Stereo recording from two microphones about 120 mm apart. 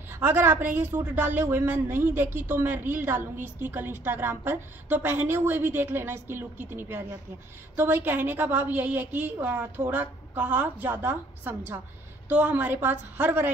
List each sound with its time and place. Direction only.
0.1 s a woman's voice: 20° right (ahead or behind)